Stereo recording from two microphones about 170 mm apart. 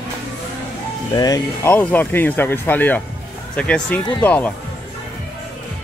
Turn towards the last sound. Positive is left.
turn(degrees=10)  # may be behind; listen again after turning